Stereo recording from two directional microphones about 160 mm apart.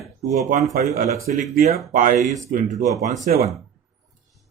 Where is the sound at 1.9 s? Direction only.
55° right (ahead or behind).